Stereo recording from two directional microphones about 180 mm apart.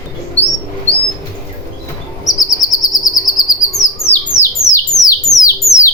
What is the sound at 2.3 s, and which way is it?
Chirp, 20° left (ahead or behind).